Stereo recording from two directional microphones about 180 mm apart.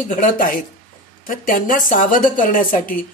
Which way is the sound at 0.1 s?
45° left (ahead or behind).